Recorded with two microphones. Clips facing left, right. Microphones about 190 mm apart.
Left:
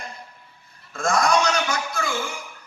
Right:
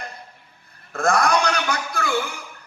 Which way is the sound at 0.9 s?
60° right (ahead or behind).